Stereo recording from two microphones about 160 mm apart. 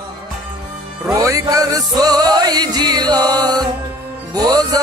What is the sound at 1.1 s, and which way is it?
Music, 20° right (ahead or behind).